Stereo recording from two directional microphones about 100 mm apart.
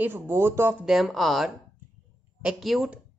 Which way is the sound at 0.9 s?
Centre (ahead or behind).